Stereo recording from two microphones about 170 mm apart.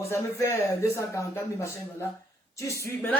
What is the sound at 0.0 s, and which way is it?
Speech, 15° left (ahead or behind).